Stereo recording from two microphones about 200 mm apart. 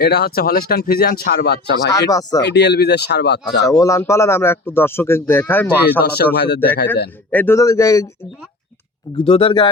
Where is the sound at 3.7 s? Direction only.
15° left (ahead or behind).